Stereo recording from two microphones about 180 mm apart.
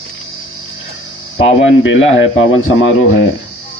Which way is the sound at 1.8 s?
90° left.